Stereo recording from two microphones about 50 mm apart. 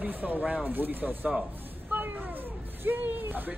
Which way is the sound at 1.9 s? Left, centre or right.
Right.